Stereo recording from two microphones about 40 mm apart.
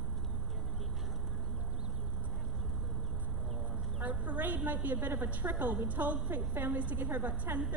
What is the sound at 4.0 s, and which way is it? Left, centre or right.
A woman's voice, right.